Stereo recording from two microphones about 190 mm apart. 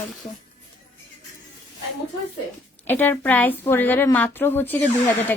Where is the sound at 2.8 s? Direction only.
10° left (ahead or behind).